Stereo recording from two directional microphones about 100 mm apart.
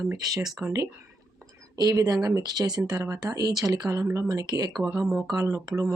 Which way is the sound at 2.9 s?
30° right (ahead or behind).